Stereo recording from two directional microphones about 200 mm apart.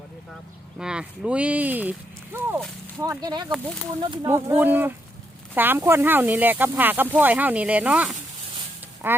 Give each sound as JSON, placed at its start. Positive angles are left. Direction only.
{"t": 0.8, "sound": "speech", "side_deg": -5}
{"t": 4.3, "sound": "speech", "side_deg": -10}